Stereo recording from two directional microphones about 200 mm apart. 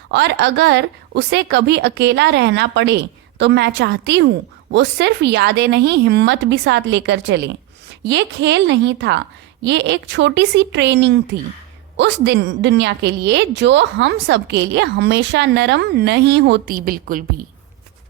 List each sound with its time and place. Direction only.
0.1 s a woman's voice: 55° right (ahead or behind)